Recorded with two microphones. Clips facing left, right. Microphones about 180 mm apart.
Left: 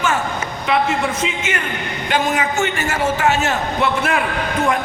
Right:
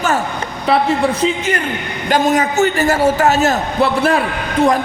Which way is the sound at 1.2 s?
35° right (ahead or behind).